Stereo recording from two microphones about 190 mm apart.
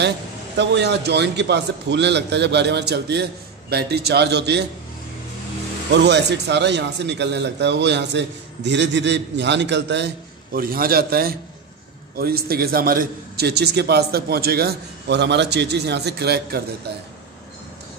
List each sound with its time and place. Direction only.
0.6 s speech: 60° right (ahead or behind)
6.0 s speech: 65° right (ahead or behind)